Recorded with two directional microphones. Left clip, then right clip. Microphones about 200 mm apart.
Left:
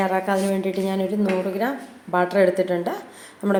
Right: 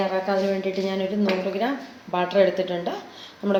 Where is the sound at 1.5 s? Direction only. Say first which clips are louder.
Left 1 dB; 30° left (ahead or behind).